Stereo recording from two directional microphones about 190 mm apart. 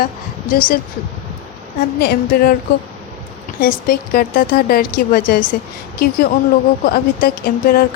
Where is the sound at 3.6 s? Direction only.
50° left (ahead or behind).